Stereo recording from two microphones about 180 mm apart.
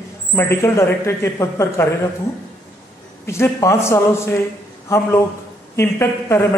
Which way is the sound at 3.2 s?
15° left (ahead or behind).